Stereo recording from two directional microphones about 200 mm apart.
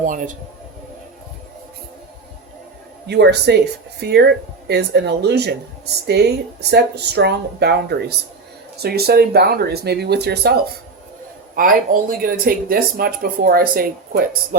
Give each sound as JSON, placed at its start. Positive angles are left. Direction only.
{"t": 0.0, "sound": "a man's voice", "side_deg": -40}
{"t": 3.1, "sound": "speech", "side_deg": -55}